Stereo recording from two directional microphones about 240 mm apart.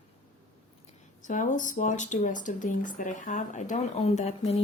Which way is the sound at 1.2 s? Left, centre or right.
Left.